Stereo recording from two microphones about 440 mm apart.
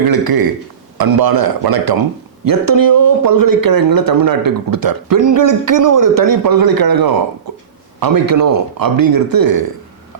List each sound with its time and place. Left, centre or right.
0.1 s a man's voice: right